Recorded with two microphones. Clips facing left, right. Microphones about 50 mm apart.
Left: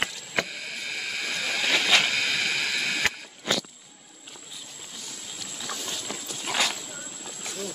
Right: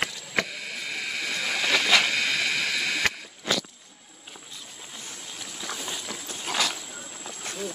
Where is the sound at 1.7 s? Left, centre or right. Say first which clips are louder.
Right 1 dB; left.